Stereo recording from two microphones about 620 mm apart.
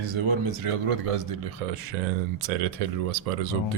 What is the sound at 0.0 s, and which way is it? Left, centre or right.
A man's voice, right.